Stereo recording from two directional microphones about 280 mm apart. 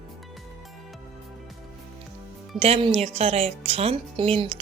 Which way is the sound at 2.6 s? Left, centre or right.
Centre.